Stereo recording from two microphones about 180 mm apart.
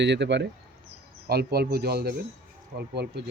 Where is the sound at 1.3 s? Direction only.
65° right (ahead or behind).